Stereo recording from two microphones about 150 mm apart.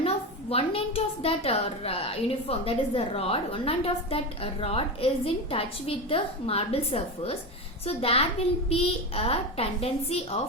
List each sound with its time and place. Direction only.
0.5 s a woman's voice: 40° left (ahead or behind)